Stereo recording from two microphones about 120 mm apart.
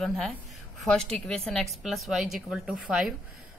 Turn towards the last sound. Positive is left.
turn(degrees=0)  # may be behind; listen again after turning